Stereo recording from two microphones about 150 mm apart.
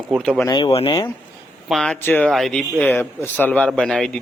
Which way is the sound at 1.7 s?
5° left (ahead or behind).